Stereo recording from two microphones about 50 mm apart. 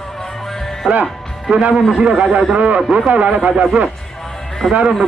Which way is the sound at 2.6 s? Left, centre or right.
Right.